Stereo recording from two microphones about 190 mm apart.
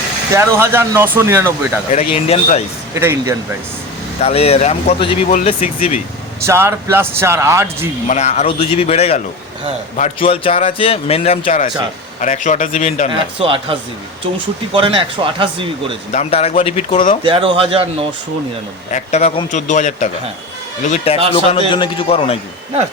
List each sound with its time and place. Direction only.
0.3 s speech: 10° right (ahead or behind)
1.9 s a man's voice: 30° left (ahead or behind)
2.9 s speech: 15° right (ahead or behind)
4.2 s a man's voice: 35° left (ahead or behind)
6.4 s speech: 15° right (ahead or behind)
8.0 s a man's voice: 35° left (ahead or behind)
13.1 s speech: 30° right (ahead or behind)
16.1 s a man's voice: 35° left (ahead or behind)
17.2 s speech: 30° right (ahead or behind)
18.9 s a man's voice: 40° left (ahead or behind)